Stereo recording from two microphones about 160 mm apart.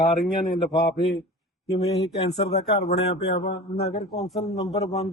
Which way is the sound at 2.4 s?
40° left (ahead or behind).